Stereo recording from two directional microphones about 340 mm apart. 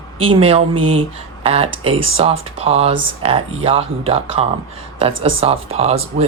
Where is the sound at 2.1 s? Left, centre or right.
Centre.